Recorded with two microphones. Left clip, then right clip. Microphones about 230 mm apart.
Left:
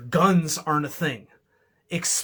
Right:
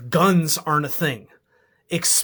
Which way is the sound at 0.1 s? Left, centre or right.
Right.